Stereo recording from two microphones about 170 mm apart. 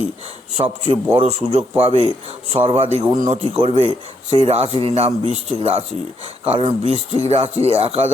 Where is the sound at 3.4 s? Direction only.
35° right (ahead or behind).